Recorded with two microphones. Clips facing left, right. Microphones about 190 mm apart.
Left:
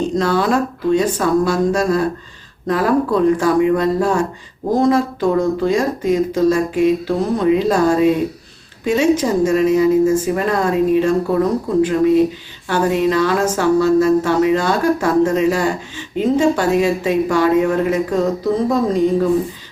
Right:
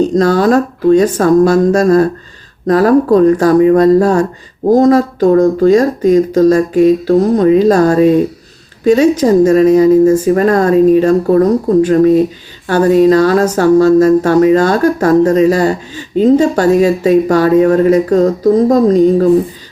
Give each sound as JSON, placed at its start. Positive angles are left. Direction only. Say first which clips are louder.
{"t": 0.2, "sound": "speech", "louder": "right 6 dB", "side_deg": -40}